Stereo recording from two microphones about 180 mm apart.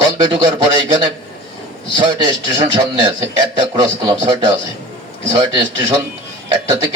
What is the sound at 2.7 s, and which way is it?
A man's voice, 25° right (ahead or behind).